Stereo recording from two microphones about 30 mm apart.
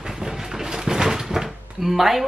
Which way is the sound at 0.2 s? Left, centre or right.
Right.